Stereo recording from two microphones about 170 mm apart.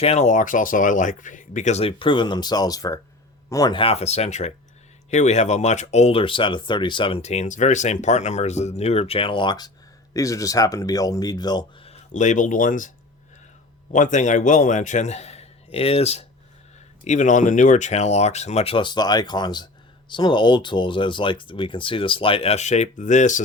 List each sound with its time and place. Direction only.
0.0 s speech: 40° left (ahead or behind); by 11.9 s 25° left (ahead or behind)
11.9 s speech: 45° left (ahead or behind)
13.9 s a man's voice: 45° left (ahead or behind)